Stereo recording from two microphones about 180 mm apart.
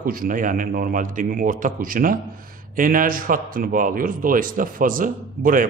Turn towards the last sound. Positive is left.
turn(degrees=-50)  # may be behind; listen again after turning